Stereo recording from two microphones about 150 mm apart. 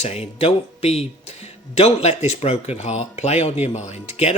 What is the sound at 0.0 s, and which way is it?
Speech, 45° left (ahead or behind).